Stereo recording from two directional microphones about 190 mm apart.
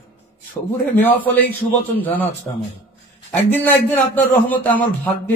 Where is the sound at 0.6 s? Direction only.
10° left (ahead or behind).